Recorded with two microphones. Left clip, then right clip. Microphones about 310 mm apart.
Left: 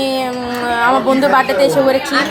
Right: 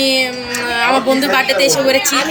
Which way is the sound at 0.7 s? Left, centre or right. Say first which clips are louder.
Left 1 dB; centre.